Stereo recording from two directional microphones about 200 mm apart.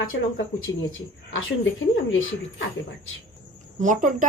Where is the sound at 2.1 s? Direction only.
80° left.